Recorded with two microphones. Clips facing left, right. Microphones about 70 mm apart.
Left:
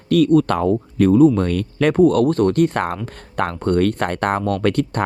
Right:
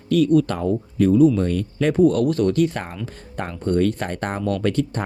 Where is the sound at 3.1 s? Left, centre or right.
Left.